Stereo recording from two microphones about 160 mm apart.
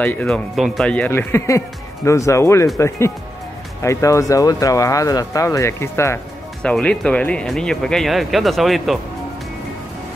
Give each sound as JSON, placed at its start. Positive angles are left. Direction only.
{"t": 0.0, "sound": "speech", "side_deg": 10}